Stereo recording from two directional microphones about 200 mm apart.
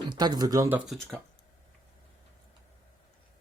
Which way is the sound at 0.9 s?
5° left (ahead or behind).